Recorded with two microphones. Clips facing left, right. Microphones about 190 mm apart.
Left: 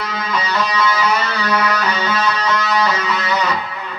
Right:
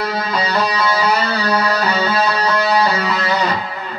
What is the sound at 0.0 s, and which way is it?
Music, 35° right (ahead or behind).